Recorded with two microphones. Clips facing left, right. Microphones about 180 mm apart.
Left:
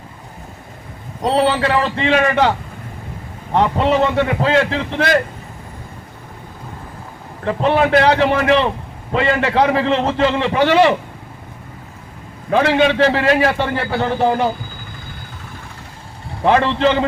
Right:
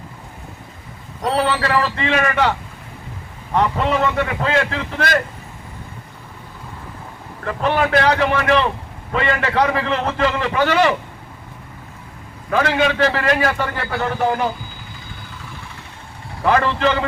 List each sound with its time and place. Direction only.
1.2 s a man's voice: 30° left (ahead or behind)
7.4 s a man's voice: 30° left (ahead or behind)
12.5 s a man's voice: 30° left (ahead or behind)
16.4 s a man's voice: 25° left (ahead or behind)